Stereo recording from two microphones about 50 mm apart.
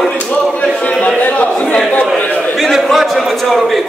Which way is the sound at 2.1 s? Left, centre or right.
Left.